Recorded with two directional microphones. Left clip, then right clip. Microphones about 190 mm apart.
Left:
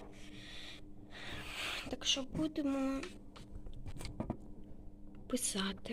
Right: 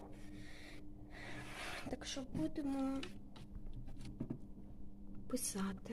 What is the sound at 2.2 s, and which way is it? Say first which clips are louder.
Speech: left 4 dB; 5° right (ahead or behind).